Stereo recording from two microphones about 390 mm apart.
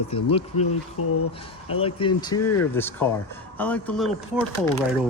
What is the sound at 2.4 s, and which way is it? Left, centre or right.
Speech, left.